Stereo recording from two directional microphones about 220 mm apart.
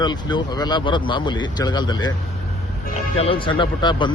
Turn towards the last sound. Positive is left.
turn(degrees=20)  # may be behind; listen again after turning